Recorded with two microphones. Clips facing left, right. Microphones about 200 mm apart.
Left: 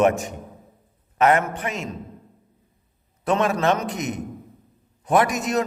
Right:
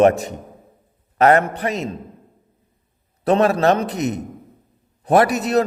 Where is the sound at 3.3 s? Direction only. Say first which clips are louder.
Right 5 dB; 35° right (ahead or behind).